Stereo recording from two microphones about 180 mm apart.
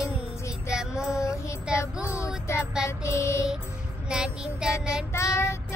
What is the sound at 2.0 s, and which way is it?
Child singing, 15° left (ahead or behind).